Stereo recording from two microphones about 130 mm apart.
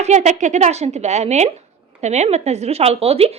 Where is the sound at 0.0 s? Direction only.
60° right (ahead or behind).